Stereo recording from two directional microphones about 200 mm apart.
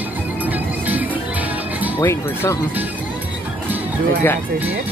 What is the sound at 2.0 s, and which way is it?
Speech, 15° left (ahead or behind).